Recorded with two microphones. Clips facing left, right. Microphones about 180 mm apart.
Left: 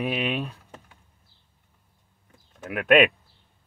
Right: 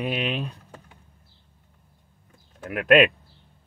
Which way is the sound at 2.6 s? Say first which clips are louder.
Right 1 dB; centre (ahead or behind).